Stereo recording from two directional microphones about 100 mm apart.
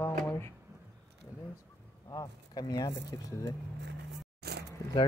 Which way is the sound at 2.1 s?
40° left (ahead or behind).